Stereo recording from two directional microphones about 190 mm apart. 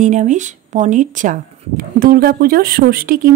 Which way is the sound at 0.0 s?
40° right (ahead or behind).